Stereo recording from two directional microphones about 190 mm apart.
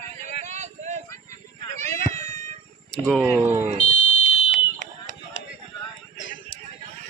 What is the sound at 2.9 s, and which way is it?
Speech, centre (ahead or behind).